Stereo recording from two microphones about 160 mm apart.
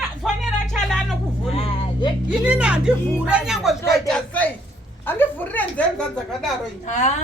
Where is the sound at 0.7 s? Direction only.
Centre (ahead or behind).